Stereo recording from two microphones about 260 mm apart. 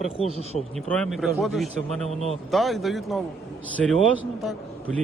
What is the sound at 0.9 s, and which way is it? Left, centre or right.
Speech, centre.